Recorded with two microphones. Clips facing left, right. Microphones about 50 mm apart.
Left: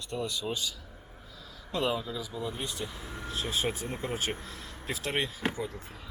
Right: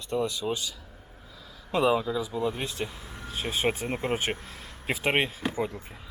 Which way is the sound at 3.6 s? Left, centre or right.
Right.